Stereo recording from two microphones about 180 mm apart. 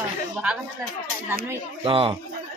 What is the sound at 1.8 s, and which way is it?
Speech, 30° right (ahead or behind).